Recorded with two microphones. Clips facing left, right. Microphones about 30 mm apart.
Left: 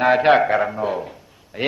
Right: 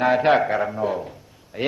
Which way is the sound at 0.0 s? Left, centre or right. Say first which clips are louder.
Left 3 dB; centre.